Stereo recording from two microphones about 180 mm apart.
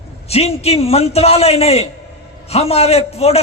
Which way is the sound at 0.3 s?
35° left (ahead or behind).